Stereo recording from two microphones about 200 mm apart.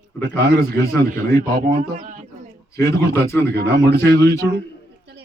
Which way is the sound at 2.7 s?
50° right (ahead or behind).